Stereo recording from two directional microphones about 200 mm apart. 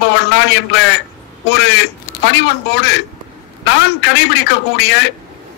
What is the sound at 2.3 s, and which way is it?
A man's voice, 55° left (ahead or behind).